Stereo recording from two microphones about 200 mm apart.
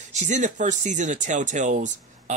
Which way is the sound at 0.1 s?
35° right (ahead or behind).